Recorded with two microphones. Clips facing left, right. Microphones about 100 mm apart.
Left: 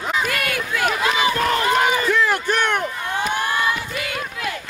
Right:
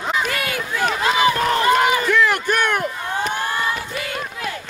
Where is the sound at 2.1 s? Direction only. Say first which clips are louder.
Right 2 dB; 70° right (ahead or behind).